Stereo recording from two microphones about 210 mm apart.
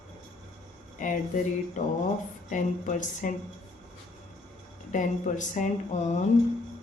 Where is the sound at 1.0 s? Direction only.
35° left (ahead or behind).